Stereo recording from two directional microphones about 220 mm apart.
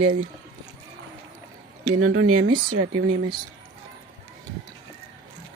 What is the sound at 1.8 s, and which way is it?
Speech, 75° right (ahead or behind).